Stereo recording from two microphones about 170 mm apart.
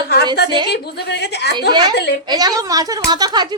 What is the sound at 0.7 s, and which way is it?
Speech, 75° left (ahead or behind).